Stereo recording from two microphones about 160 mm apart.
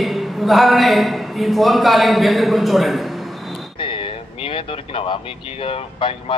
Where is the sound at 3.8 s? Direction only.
35° left (ahead or behind).